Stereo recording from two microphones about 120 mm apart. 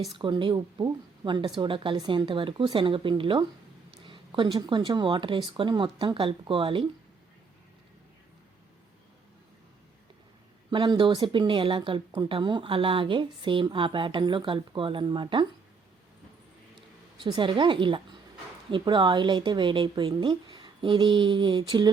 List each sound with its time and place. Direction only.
0.2 s speech: 40° right (ahead or behind)
10.7 s speech: 45° right (ahead or behind)
17.2 s speech: 45° right (ahead or behind)